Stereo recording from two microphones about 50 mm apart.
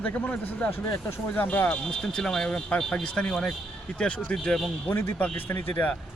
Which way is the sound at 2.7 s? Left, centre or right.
Left.